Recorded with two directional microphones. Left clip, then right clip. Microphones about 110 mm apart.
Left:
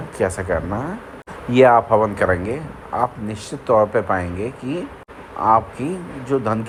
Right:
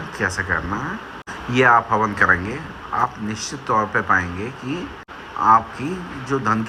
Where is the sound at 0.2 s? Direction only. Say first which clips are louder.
Left 1 dB; 35° left (ahead or behind).